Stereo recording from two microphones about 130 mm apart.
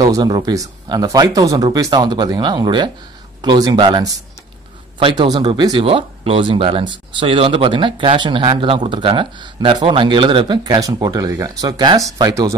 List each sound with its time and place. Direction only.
0.0 s speech: 30° right (ahead or behind)